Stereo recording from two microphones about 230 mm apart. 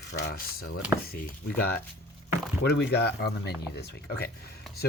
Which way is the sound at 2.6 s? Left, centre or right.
Left.